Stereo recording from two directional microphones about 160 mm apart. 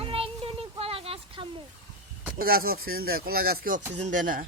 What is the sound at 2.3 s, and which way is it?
Speech, 70° right (ahead or behind).